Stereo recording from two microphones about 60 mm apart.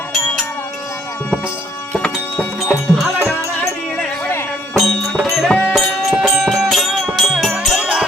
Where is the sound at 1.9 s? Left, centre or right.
Left.